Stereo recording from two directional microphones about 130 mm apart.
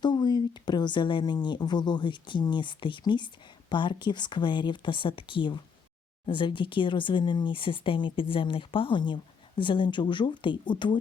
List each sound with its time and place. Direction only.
0.0 s speech: 35° left (ahead or behind)